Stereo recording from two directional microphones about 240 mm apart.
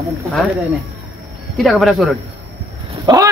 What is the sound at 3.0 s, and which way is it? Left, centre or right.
Speech, centre.